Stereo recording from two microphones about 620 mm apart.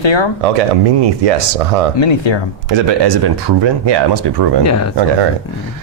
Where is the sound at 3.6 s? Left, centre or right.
Right.